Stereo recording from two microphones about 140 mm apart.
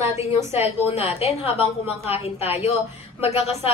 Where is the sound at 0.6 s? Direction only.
45° left (ahead or behind).